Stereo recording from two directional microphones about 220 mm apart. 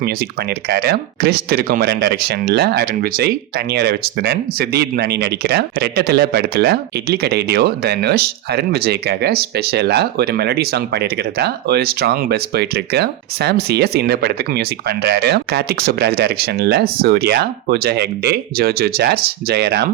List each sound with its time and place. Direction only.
0.7 s speech: 45° right (ahead or behind)